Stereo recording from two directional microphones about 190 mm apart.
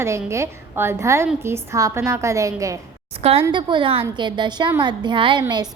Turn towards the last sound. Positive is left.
turn(degrees=-20)  # may be behind; listen again after turning